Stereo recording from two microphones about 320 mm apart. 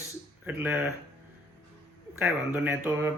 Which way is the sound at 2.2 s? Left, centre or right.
Centre.